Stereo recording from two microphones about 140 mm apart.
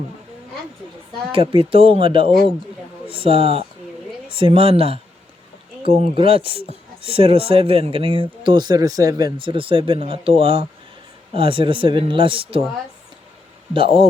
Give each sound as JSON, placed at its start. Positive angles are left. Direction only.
{"t": 1.3, "sound": "speech", "side_deg": -40}
{"t": 6.1, "sound": "speech", "side_deg": -40}
{"t": 13.7, "sound": "speech", "side_deg": -40}